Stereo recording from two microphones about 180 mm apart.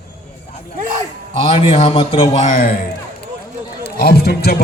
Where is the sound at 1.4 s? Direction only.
35° left (ahead or behind).